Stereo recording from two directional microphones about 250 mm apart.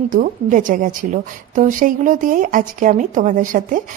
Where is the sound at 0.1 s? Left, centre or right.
Right.